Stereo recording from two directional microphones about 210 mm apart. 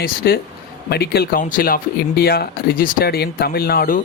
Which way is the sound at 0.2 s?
50° left (ahead or behind).